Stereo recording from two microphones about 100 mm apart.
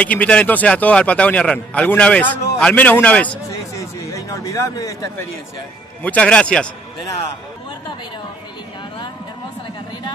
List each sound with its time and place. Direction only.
0.0 s a man's voice: 15° left (ahead or behind)
3.7 s a sound: 35° left (ahead or behind)
6.0 s a man's voice: 10° left (ahead or behind)